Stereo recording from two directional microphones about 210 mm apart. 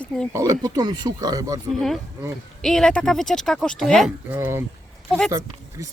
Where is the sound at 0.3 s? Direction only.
15° right (ahead or behind).